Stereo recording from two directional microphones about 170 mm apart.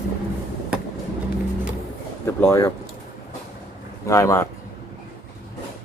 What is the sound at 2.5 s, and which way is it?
Speech, 20° left (ahead or behind).